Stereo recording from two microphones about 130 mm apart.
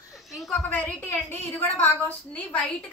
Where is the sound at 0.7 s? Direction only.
15° left (ahead or behind).